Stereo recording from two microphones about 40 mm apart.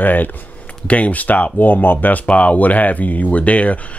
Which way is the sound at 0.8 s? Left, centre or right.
Left.